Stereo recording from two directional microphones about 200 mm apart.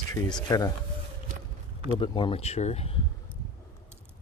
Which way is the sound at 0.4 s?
20° left (ahead or behind).